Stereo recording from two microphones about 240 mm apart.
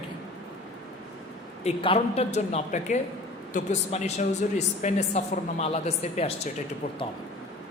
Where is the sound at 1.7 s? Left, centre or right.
Left.